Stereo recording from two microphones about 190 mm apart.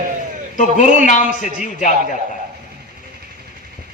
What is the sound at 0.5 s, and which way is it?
Speech, 40° left (ahead or behind).